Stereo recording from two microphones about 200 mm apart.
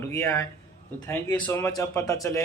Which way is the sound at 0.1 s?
15° left (ahead or behind).